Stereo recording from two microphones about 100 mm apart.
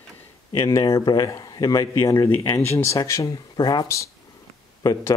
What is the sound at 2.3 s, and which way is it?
Speech, 25° left (ahead or behind).